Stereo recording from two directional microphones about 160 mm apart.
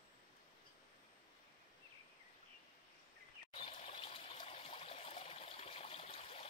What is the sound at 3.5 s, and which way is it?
Water, 40° left (ahead or behind).